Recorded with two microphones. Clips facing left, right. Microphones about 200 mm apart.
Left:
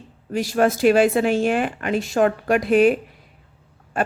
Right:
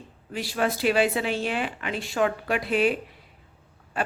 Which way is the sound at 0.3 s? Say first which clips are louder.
Left 8 dB; 45° left (ahead or behind).